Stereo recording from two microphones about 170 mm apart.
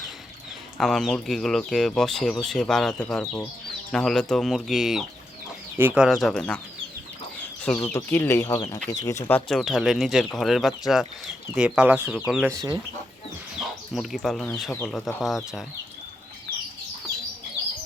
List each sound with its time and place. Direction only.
0.8 s speech: centre (ahead or behind)
7.9 s speech: 10° left (ahead or behind)
9.5 s speech: centre (ahead or behind)
12.5 s speech: 20° right (ahead or behind)
13.6 s speech: centre (ahead or behind)